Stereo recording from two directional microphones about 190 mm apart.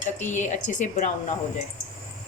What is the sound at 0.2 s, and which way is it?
Speech, 40° left (ahead or behind).